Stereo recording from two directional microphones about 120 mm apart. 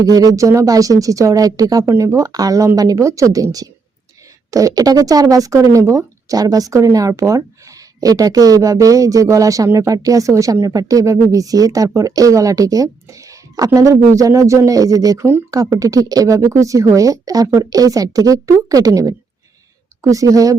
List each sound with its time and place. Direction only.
0.0 s speech: 30° right (ahead or behind)